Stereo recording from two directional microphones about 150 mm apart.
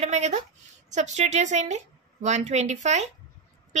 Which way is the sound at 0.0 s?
50° right (ahead or behind).